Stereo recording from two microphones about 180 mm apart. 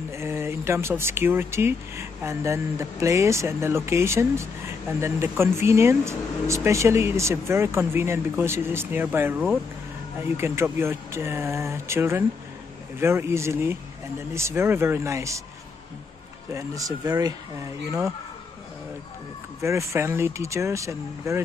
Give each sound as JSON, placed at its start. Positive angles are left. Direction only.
{"t": 0.1, "sound": "speech", "side_deg": -15}
{"t": 16.5, "sound": "speech", "side_deg": -20}
{"t": 19.6, "sound": "speech", "side_deg": -15}